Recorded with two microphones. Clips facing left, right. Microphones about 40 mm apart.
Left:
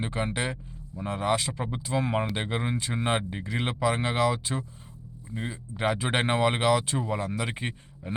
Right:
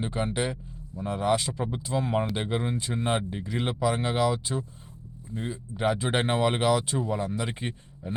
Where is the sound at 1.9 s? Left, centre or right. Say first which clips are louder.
Even; left.